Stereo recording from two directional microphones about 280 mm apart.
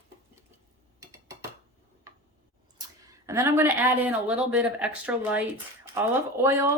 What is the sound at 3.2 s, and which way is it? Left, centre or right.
Speech, centre.